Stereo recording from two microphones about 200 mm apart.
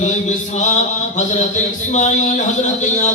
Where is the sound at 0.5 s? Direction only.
35° left (ahead or behind).